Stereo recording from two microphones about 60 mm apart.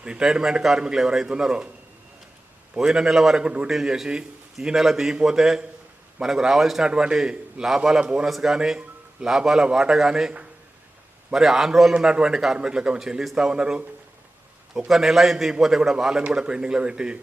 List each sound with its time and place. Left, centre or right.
0.0 s a man's voice: centre
2.7 s a man's voice: centre
3.4 s a man's voice: centre
3.7 s a man's voice: centre
14.8 s a man's voice: centre